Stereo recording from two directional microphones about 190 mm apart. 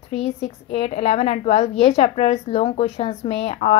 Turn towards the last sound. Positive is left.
turn(degrees=30)  # may be behind; listen again after turning